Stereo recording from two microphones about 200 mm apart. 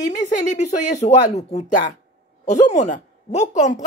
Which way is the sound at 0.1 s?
40° left (ahead or behind).